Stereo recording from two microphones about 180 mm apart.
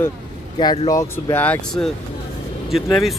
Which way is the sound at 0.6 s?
25° left (ahead or behind).